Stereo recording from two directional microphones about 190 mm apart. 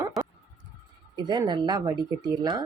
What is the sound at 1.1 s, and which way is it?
A woman's voice, 20° right (ahead or behind).